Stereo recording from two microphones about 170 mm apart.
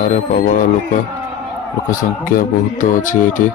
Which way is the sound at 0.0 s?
50° left (ahead or behind).